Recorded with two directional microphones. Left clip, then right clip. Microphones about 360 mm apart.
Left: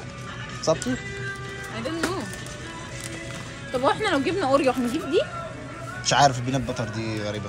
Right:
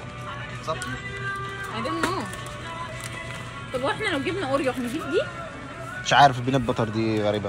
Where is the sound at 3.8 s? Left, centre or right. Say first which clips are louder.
Left 4 dB; centre.